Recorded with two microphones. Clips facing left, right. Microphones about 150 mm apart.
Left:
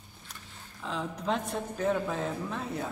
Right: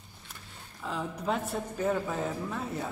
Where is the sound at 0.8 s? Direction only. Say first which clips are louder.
Even; 5° right (ahead or behind).